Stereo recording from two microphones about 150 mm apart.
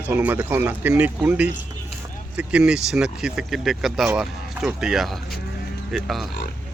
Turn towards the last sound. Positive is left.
turn(degrees=0)  # may be behind; listen again after turning